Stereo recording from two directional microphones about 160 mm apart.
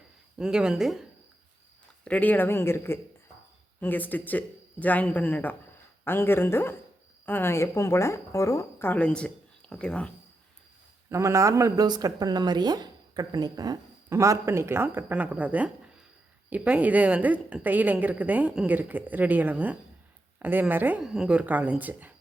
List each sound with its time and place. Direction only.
0.3 s speech: 5° right (ahead or behind)
2.0 s a woman's voice: 10° left (ahead or behind)
11.1 s a woman's voice: 20° right (ahead or behind)